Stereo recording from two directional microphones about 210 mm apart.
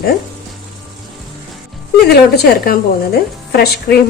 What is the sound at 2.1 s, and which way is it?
A woman's voice, 50° left (ahead or behind).